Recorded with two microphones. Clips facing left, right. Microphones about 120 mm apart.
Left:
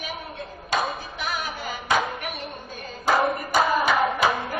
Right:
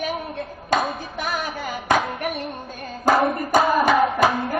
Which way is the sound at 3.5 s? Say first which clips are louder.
Right 4 dB; 50° right (ahead or behind).